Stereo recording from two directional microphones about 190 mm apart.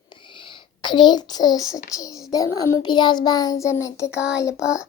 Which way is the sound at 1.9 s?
20° left (ahead or behind).